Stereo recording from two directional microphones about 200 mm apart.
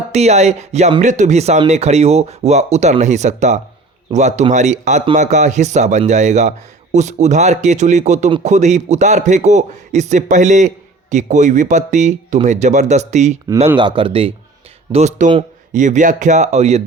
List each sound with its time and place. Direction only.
0.1 s speech: 35° right (ahead or behind)
13.7 s speech: 25° right (ahead or behind)